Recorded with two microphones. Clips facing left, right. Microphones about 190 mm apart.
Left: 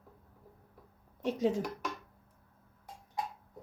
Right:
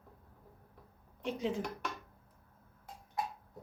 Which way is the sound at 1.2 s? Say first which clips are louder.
Left 5 dB; 40° left (ahead or behind).